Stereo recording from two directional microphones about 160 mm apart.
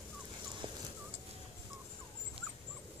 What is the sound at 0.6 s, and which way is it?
Fowl, 30° right (ahead or behind).